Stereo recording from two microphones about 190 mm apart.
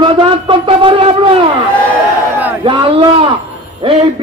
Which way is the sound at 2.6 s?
25° right (ahead or behind).